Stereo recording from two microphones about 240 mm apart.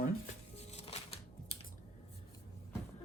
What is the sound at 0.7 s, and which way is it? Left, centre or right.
Music, left.